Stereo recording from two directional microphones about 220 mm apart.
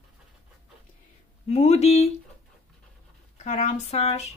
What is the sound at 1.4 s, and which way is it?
Speech, 30° left (ahead or behind).